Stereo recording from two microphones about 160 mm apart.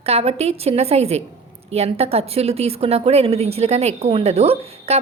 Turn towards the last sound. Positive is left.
turn(degrees=-40)  # may be behind; listen again after turning